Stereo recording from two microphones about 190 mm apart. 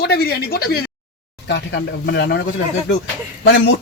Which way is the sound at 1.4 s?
65° left (ahead or behind).